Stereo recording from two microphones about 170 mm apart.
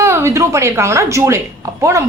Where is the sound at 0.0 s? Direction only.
15° right (ahead or behind).